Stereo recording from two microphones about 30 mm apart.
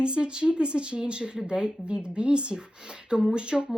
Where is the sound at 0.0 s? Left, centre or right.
Right.